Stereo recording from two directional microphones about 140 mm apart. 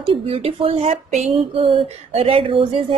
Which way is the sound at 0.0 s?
45° right (ahead or behind).